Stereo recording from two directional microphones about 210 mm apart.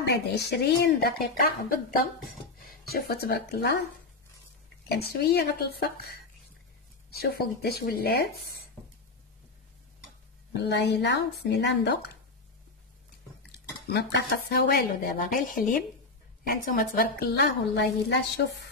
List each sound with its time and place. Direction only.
0.0 s speech: 50° left (ahead or behind)
4.8 s speech: 50° left (ahead or behind)
10.5 s speech: 55° left (ahead or behind)
13.5 s speech: 50° left (ahead or behind)